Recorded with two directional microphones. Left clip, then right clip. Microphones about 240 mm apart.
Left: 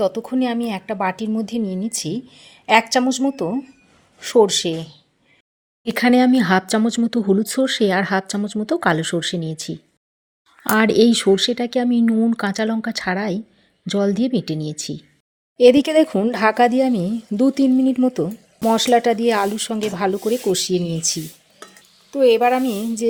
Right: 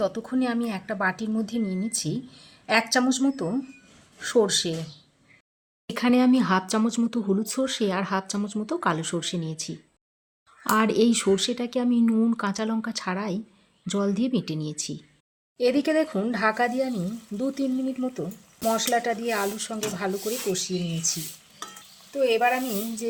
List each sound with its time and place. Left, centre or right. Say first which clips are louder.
0.0 s speech: left 6 dB; left
5.9 s speech: left 6 dB; centre
15.5 s speech: left 10 dB; left
22.2 s speech: left 8 dB; left